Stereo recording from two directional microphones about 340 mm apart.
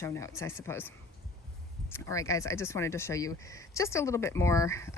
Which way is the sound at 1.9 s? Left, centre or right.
Centre.